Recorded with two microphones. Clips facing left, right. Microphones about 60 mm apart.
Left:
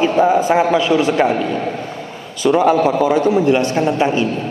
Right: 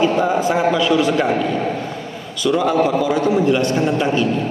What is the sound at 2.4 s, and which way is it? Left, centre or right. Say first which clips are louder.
A man's voice: left 3 dB; left.